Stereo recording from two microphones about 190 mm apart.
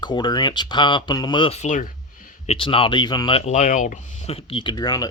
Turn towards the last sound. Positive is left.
turn(degrees=20)  # may be behind; listen again after turning